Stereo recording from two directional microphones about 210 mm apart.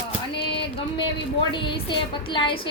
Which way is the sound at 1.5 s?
25° left (ahead or behind).